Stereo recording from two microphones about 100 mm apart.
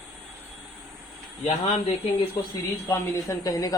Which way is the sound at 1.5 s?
90° left.